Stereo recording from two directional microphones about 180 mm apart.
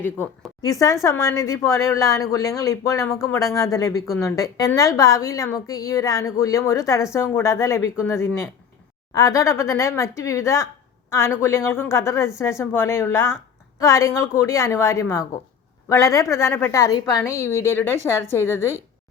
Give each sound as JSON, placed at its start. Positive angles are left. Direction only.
{"t": 0.6, "sound": "a woman's voice", "side_deg": 20}